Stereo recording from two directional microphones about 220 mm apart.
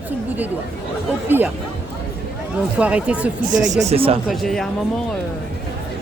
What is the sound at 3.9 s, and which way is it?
Speech, 25° right (ahead or behind).